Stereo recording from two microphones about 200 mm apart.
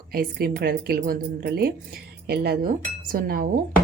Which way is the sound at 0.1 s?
50° right (ahead or behind).